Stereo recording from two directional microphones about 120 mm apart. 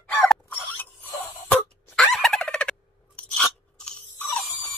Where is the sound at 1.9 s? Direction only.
Centre (ahead or behind).